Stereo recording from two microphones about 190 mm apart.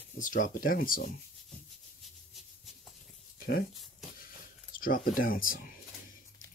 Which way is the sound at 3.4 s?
55° left (ahead or behind).